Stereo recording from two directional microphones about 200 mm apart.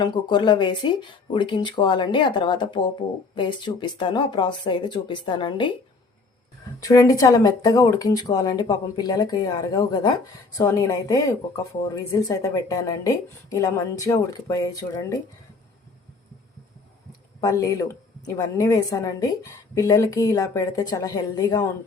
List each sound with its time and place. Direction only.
0.0 s speech: 20° left (ahead or behind)
6.7 s speech: 15° left (ahead or behind)
17.4 s speech: 15° left (ahead or behind)